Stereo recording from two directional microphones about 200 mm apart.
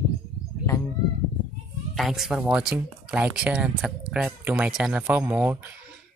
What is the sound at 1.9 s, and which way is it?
Speech, centre (ahead or behind).